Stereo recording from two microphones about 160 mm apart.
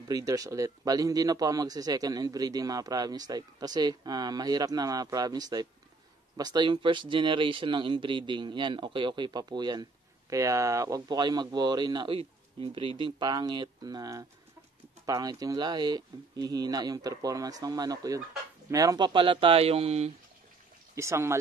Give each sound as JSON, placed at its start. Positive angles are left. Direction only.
{"t": 0.1, "sound": "a man's voice", "side_deg": -20}
{"t": 20.9, "sound": "speech", "side_deg": -15}